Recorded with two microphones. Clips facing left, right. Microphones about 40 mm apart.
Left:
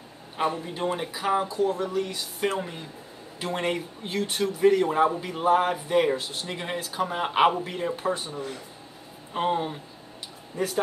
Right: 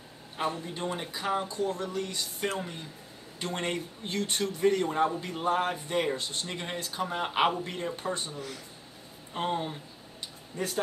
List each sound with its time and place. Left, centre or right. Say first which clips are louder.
0.4 s a man's voice: left 5 dB; centre